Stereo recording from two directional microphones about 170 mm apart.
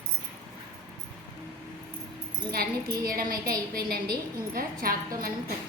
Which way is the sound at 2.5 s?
60° right (ahead or behind).